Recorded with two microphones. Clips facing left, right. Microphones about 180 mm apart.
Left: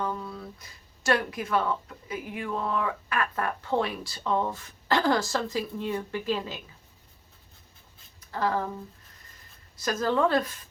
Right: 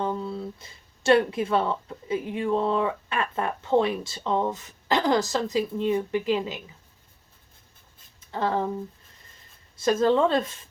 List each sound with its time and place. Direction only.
0.0 s speech: 25° right (ahead or behind)
8.3 s speech: 25° right (ahead or behind)
9.8 s speech: 25° right (ahead or behind)